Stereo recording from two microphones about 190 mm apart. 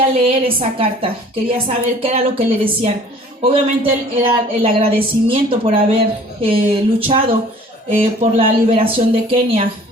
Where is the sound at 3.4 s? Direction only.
30° right (ahead or behind).